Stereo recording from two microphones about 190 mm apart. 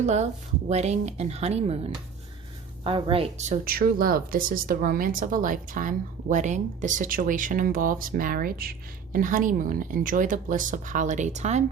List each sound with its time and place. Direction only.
0.0 s speech: 35° right (ahead or behind)
2.8 s speech: 30° right (ahead or behind)